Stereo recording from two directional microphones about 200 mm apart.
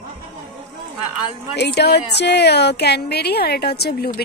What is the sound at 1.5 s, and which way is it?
Speech, 55° left (ahead or behind).